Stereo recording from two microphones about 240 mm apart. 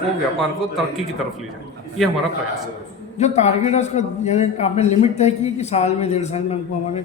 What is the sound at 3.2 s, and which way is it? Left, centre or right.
A man's voice, left.